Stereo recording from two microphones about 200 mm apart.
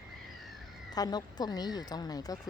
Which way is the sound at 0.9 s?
20° left (ahead or behind).